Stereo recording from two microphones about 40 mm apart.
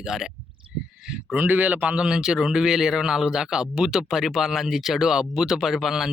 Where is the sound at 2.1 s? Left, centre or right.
Centre.